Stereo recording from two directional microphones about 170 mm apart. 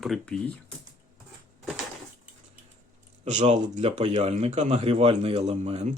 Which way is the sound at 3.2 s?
45° right (ahead or behind).